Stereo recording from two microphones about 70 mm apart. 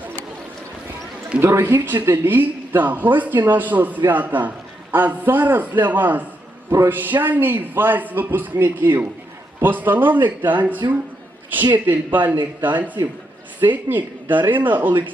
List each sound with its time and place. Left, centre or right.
1.4 s a man's voice: right
2.0 s a woman's voice: right
2.3 s a man's voice: right
6.7 s a man's voice: right